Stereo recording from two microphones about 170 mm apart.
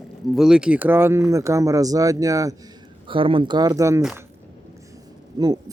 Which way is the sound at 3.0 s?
30° right (ahead or behind).